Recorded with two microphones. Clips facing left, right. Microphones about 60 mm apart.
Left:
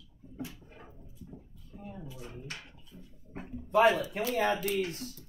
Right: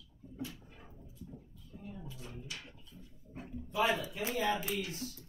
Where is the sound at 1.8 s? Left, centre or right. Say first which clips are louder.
Left 3 dB; left.